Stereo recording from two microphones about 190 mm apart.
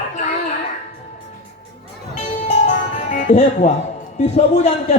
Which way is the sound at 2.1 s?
40° left (ahead or behind).